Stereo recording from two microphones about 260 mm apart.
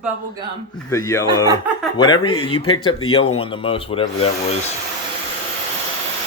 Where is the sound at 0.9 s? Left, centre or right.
Centre.